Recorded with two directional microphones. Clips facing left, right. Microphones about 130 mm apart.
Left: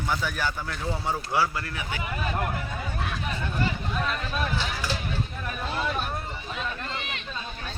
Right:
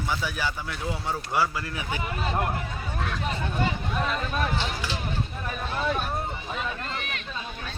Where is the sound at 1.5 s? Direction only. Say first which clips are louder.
Right 1 dB; 15° right (ahead or behind).